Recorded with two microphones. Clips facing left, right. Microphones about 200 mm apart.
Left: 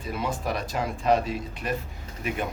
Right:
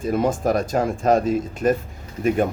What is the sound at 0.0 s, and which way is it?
Speech, 45° right (ahead or behind).